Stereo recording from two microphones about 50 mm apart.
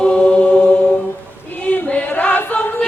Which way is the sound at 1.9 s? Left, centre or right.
Left.